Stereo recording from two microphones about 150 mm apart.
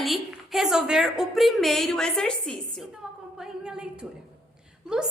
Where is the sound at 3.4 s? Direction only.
5° right (ahead or behind).